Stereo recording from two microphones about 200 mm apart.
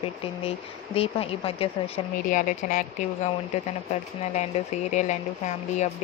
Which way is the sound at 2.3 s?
40° left (ahead or behind).